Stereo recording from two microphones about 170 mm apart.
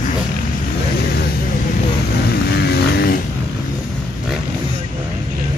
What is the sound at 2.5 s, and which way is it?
Vehicle, 70° left (ahead or behind).